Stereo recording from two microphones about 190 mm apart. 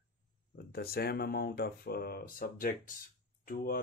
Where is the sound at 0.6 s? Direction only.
55° left (ahead or behind).